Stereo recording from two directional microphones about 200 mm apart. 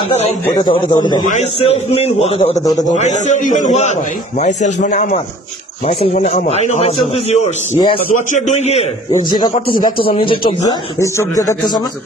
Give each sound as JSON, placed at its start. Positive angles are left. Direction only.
{"t": 0.5, "sound": "speech", "side_deg": 20}
{"t": 1.2, "sound": "a man's voice", "side_deg": 35}
{"t": 2.6, "sound": "speech", "side_deg": 20}
{"t": 2.9, "sound": "a man's voice", "side_deg": 35}
{"t": 9.3, "sound": "speech", "side_deg": 20}